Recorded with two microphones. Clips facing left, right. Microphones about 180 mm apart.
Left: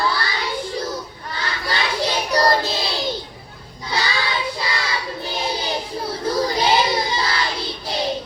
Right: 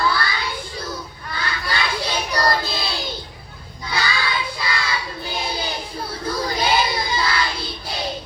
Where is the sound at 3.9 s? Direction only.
35° left (ahead or behind).